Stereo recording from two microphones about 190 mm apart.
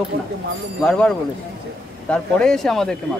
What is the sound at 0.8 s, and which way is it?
Speech, 5° left (ahead or behind).